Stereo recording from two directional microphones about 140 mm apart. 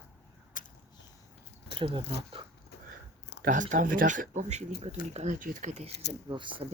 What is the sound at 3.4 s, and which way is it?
Speech, 65° right (ahead or behind).